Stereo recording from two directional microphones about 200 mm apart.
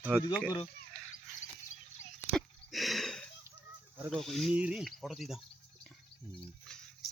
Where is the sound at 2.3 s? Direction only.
Centre (ahead or behind).